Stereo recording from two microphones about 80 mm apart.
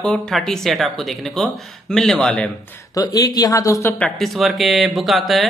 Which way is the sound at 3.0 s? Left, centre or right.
Left.